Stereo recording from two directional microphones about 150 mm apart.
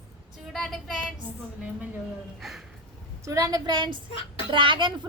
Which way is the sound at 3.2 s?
25° right (ahead or behind).